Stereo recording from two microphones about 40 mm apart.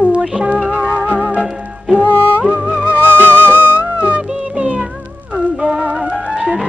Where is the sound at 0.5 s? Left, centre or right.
Right.